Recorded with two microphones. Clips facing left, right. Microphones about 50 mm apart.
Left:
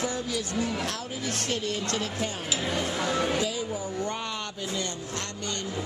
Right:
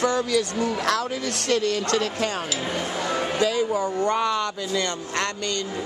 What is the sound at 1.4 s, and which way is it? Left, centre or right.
Speech, right.